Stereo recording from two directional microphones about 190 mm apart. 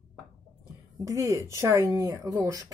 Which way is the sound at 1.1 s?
15° right (ahead or behind).